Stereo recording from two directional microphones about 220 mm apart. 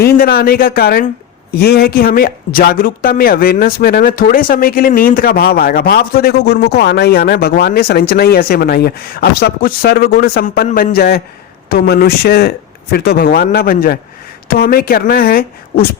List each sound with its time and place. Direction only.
0.0 s a man's voice: 45° left (ahead or behind)